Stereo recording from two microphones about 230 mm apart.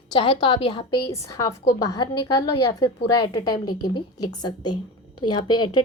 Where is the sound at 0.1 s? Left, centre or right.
Left.